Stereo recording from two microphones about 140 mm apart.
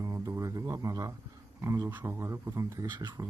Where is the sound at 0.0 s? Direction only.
25° right (ahead or behind).